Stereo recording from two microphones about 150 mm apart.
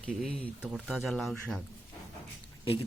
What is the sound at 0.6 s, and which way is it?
Speech, 5° right (ahead or behind).